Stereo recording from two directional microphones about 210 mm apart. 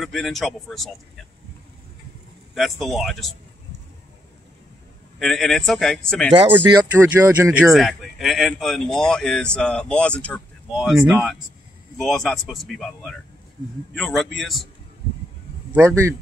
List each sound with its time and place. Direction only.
0.0 s speech: centre (ahead or behind)
2.5 s speech: centre (ahead or behind)
5.2 s speech: centre (ahead or behind)
6.3 s speech: 25° right (ahead or behind)
7.0 s speech: 15° right (ahead or behind)
7.7 s speech: centre (ahead or behind)
15.7 s speech: 15° right (ahead or behind)